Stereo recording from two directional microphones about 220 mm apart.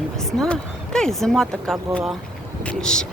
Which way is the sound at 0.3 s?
5° left (ahead or behind).